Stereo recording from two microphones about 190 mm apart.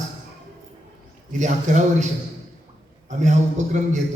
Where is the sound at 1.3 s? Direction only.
40° right (ahead or behind).